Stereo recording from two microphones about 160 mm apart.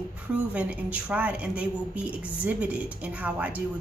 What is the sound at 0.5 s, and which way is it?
A woman's voice, 10° right (ahead or behind).